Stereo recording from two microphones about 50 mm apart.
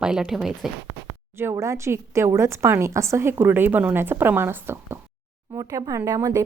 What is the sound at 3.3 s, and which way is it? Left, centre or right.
A woman's voice, right.